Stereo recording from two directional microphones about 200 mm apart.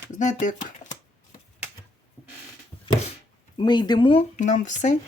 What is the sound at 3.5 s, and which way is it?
Speech, 20° left (ahead or behind).